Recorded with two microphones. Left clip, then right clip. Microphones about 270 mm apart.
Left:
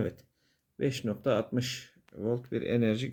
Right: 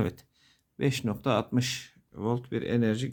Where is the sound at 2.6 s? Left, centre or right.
Centre.